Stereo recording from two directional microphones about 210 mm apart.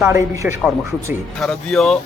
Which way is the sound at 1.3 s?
Centre (ahead or behind).